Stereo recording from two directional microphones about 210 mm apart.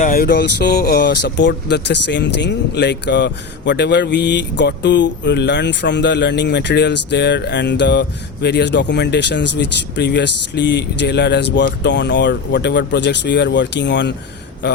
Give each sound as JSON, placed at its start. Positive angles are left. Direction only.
{"t": 0.0, "sound": "speech", "side_deg": 45}